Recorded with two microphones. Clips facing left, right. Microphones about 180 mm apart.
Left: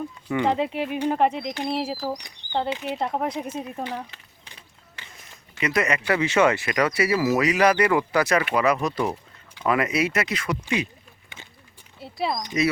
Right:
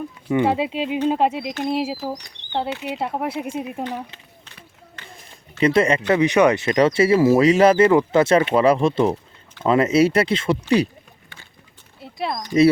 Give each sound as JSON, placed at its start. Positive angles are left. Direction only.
{"t": 0.4, "sound": "speech", "side_deg": -10}
{"t": 5.5, "sound": "speech", "side_deg": -30}
{"t": 6.1, "sound": "speech", "side_deg": -15}
{"t": 11.9, "sound": "a sound", "side_deg": 0}